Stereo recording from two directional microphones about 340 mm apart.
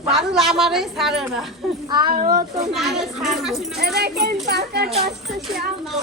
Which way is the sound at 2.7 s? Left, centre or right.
Centre.